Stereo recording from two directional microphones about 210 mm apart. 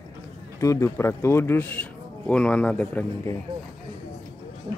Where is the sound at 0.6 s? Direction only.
15° left (ahead or behind).